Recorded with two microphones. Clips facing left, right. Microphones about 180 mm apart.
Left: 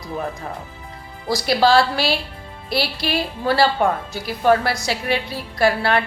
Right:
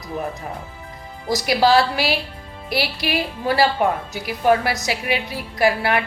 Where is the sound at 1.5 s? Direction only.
15° right (ahead or behind).